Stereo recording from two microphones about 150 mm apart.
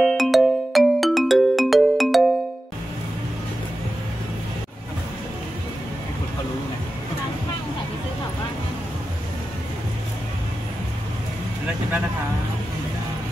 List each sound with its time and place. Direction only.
0.0 s music: centre (ahead or behind)